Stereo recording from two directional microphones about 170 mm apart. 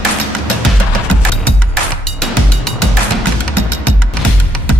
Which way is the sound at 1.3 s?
5° left (ahead or behind).